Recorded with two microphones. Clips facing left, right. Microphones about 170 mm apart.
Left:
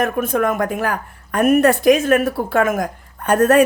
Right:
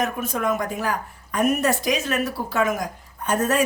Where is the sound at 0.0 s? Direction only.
55° left (ahead or behind).